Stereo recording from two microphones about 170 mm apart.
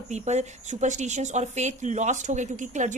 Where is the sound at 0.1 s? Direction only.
40° right (ahead or behind).